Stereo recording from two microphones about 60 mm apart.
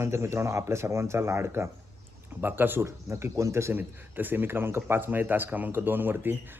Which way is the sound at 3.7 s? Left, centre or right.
Right.